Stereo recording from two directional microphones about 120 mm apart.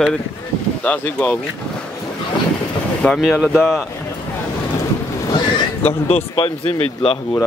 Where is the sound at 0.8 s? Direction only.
15° left (ahead or behind).